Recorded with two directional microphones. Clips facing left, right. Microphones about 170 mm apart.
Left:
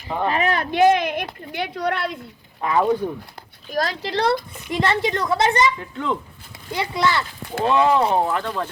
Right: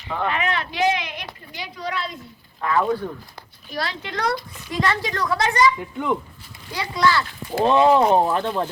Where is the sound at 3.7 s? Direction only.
45° left (ahead or behind); by 5.7 s 25° left (ahead or behind).